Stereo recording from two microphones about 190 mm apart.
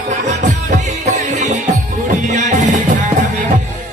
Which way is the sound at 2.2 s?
40° right (ahead or behind).